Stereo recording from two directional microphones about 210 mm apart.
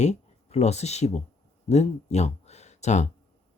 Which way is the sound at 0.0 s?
30° left (ahead or behind).